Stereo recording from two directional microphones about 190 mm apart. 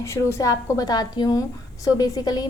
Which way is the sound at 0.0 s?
15° left (ahead or behind).